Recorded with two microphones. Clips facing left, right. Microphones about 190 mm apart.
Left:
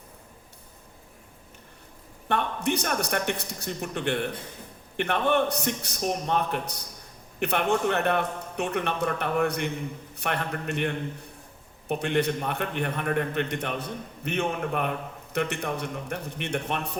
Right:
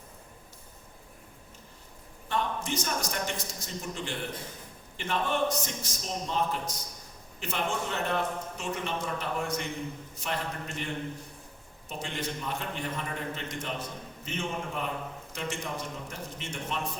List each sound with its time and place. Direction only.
2.2 s a man's voice: 65° left (ahead or behind)